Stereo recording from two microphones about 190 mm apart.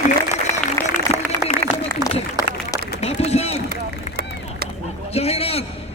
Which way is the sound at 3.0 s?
35° left (ahead or behind).